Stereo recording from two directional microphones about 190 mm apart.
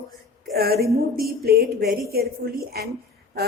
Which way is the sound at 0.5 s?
55° right (ahead or behind).